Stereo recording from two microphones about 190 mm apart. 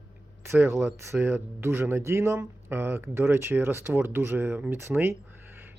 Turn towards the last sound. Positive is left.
turn(degrees=-10)  # may be behind; listen again after turning